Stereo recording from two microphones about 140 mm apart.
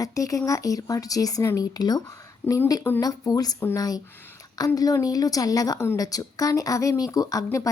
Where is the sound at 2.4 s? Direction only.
15° left (ahead or behind).